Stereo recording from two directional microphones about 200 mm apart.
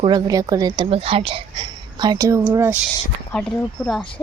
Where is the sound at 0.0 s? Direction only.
20° right (ahead or behind).